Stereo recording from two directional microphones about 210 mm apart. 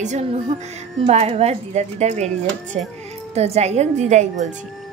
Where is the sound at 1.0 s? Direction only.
30° right (ahead or behind).